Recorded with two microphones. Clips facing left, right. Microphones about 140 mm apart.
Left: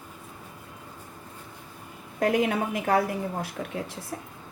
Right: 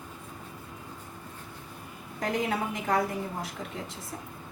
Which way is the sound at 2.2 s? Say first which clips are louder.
Left 5 dB; 65° left (ahead or behind).